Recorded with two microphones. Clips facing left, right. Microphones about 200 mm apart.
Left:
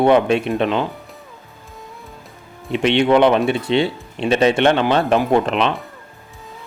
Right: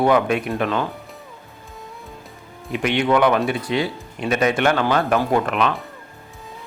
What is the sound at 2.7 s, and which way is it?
Speech, 25° left (ahead or behind).